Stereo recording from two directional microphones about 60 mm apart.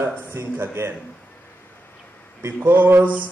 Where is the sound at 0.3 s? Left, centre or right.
Right.